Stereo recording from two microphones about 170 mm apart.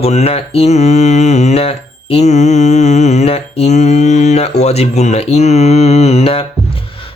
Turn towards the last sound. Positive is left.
turn(degrees=35)  # may be behind; listen again after turning